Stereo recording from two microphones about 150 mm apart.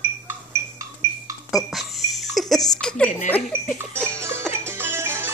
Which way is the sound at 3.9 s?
15° right (ahead or behind).